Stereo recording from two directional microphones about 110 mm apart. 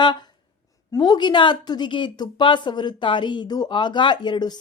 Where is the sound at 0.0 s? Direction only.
45° left (ahead or behind).